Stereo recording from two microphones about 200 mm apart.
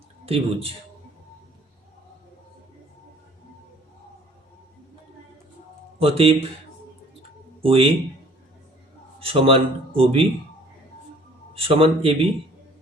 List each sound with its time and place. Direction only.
0.3 s speech: 30° right (ahead or behind)
6.0 s speech: 30° right (ahead or behind)
7.2 s a sound: 30° right (ahead or behind)
9.2 s speech: 30° right (ahead or behind)
11.5 s speech: 25° right (ahead or behind)